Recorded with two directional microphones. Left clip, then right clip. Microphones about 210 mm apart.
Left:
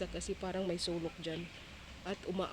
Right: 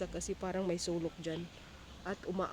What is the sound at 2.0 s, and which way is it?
Speech, centre (ahead or behind).